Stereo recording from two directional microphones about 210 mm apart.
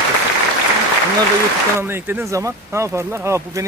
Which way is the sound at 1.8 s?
10° right (ahead or behind).